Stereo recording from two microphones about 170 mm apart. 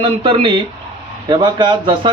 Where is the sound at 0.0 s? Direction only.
30° right (ahead or behind).